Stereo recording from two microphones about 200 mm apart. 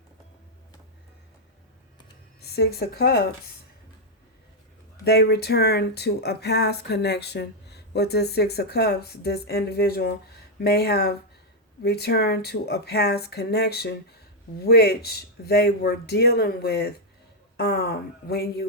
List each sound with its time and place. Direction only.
2.4 s speech: 55° left (ahead or behind)
5.0 s speech: 55° left (ahead or behind)